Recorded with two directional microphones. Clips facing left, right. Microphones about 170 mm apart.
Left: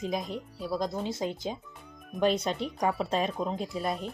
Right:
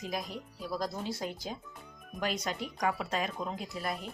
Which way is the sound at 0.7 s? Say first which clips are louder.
Left 4 dB; 20° left (ahead or behind).